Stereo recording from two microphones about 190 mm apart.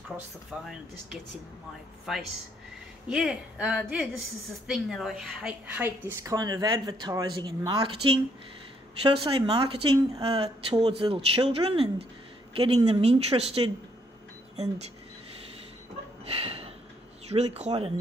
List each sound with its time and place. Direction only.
2.1 s a woman's voice: centre (ahead or behind); by 13.7 s 30° right (ahead or behind)
16.3 s a sound: 30° right (ahead or behind)
17.3 s speech: 35° right (ahead or behind)